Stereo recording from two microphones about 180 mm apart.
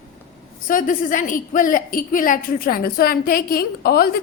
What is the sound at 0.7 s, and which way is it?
A woman's voice, 50° left (ahead or behind).